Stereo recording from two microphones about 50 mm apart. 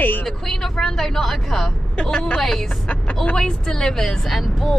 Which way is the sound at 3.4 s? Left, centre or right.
Centre.